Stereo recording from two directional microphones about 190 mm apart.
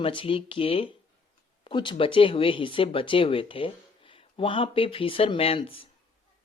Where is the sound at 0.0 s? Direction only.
30° left (ahead or behind).